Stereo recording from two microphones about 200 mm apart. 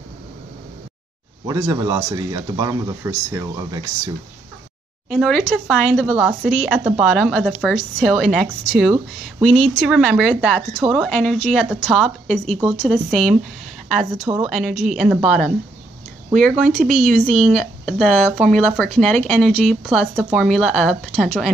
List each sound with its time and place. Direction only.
1.5 s speech: 15° right (ahead or behind)
5.1 s speech: centre (ahead or behind)
16.5 s speech: centre (ahead or behind)